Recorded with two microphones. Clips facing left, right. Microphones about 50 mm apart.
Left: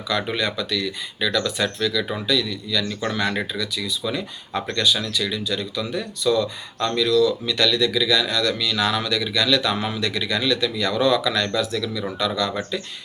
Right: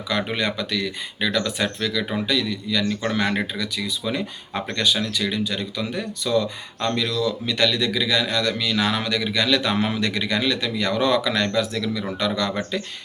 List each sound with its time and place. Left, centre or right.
0.1 s speech: right
2.2 s speech: right